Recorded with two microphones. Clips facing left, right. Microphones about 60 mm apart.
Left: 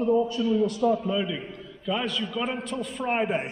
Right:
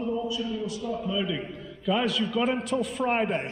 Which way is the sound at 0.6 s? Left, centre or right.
Left.